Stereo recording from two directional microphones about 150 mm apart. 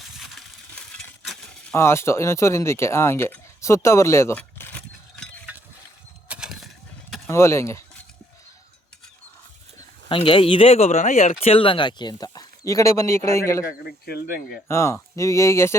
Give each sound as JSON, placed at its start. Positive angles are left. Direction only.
{"t": 0.0, "sound": "a sound", "side_deg": 0}
{"t": 1.7, "sound": "speech", "side_deg": 15}
{"t": 4.4, "sound": "keys jangling", "side_deg": 10}
{"t": 6.2, "sound": "a sound", "side_deg": -5}
{"t": 7.3, "sound": "speech", "side_deg": 20}
{"t": 10.1, "sound": "speech", "side_deg": 35}
{"t": 13.8, "sound": "speech", "side_deg": 90}
{"t": 14.7, "sound": "speech", "side_deg": 20}